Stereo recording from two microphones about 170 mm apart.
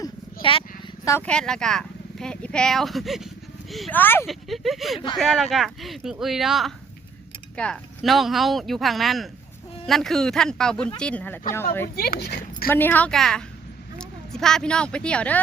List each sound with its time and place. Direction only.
1.0 s a woman's voice: 15° left (ahead or behind)
1.3 s speech: 5° left (ahead or behind)
3.9 s a woman's voice: 10° left (ahead or behind)
4.3 s a woman's voice: centre (ahead or behind)
11.9 s speech: 65° left (ahead or behind)
12.6 s a woman's voice: 10° left (ahead or behind)